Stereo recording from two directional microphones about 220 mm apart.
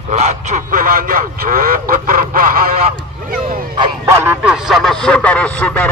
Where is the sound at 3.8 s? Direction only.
15° right (ahead or behind).